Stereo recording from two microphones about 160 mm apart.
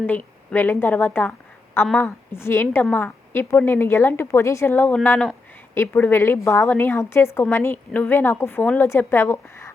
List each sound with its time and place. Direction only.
0.0 s a woman's voice: 10° left (ahead or behind)